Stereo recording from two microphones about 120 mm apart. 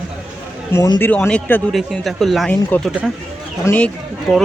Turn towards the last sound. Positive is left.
turn(degrees=0)  # may be behind; listen again after turning